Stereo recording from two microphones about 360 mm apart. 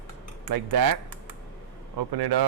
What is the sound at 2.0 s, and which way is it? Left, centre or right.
Speech, right.